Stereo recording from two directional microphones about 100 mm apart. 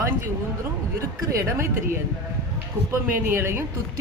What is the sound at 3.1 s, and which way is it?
Speech, 25° right (ahead or behind).